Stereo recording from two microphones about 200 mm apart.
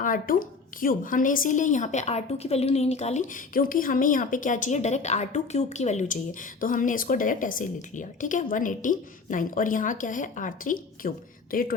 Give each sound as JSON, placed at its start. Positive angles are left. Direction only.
{"t": 0.0, "sound": "a woman's voice", "side_deg": 45}